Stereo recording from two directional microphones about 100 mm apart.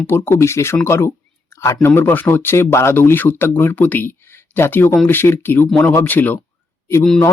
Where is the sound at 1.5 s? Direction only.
30° left (ahead or behind).